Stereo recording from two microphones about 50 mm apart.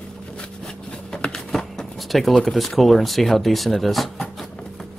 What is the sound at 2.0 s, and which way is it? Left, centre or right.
Speech, centre.